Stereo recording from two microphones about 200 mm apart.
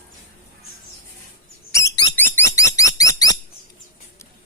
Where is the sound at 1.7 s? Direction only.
15° left (ahead or behind).